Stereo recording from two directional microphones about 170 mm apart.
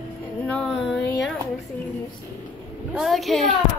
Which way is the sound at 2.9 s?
Centre (ahead or behind).